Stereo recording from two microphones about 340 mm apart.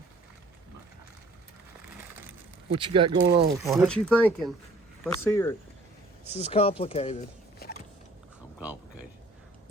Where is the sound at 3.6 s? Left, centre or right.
Centre.